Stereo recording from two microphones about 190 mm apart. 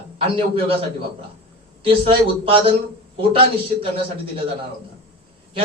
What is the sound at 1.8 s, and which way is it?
A man's voice, 30° right (ahead or behind).